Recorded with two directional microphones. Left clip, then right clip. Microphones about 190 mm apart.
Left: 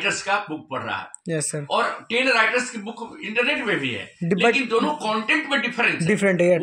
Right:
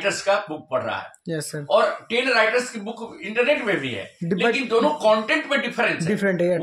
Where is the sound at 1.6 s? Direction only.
20° right (ahead or behind).